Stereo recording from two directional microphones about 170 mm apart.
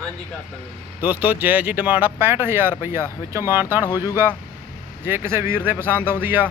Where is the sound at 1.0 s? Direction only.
10° right (ahead or behind).